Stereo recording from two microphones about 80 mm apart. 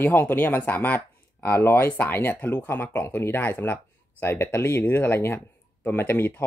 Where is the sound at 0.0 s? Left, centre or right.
Left.